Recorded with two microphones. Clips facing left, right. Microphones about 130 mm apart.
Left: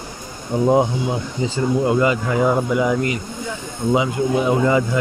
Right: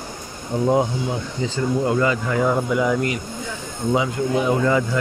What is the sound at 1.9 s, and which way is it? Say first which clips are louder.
Speech: left 2 dB; 15° left (ahead or behind).